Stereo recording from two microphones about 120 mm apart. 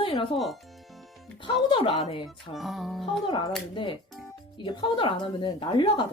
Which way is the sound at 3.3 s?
40° left (ahead or behind).